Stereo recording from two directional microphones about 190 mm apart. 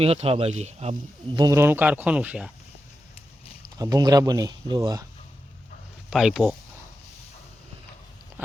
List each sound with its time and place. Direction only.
0.0 s speech: 30° right (ahead or behind)
1.4 s speech: 15° right (ahead or behind)
3.8 s speech: 20° right (ahead or behind)
6.1 s speech: centre (ahead or behind)
8.4 s a sound: 10° right (ahead or behind)